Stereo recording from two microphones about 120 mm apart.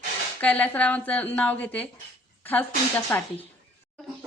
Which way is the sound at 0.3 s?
15° left (ahead or behind).